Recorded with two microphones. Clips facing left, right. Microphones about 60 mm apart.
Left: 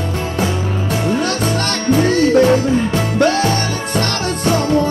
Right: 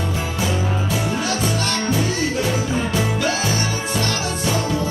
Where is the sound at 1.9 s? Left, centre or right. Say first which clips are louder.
Left 13 dB; left.